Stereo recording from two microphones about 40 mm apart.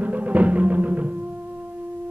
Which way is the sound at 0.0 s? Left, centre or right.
Right.